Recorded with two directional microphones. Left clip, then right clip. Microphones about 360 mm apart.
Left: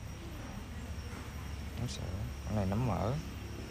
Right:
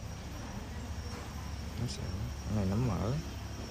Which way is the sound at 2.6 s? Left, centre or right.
Centre.